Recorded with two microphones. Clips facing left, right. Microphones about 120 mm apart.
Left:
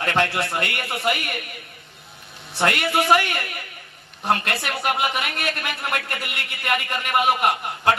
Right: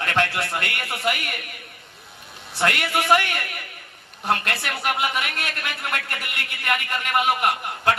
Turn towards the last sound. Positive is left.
turn(degrees=20)  # may be behind; listen again after turning